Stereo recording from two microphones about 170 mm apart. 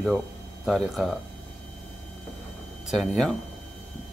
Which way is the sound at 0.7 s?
Centre (ahead or behind).